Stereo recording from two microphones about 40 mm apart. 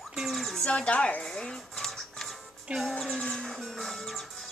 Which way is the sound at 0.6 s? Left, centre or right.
Left.